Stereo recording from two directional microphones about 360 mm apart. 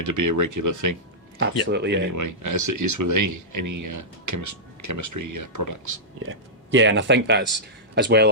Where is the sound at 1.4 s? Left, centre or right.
Right.